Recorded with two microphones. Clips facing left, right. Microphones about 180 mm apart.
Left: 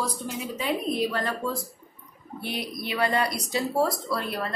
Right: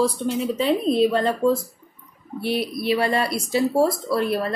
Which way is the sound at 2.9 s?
25° right (ahead or behind).